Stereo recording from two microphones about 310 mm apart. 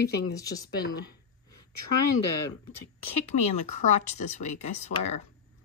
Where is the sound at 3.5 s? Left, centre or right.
Left.